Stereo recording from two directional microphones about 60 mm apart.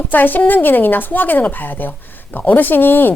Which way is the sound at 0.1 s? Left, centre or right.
Left.